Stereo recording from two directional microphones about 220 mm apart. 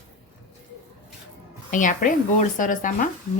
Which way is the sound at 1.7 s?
35° left (ahead or behind).